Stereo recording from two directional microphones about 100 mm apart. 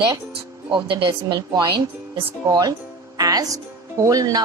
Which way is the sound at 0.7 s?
55° right (ahead or behind).